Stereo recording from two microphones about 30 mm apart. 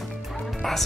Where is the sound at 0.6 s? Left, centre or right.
Centre.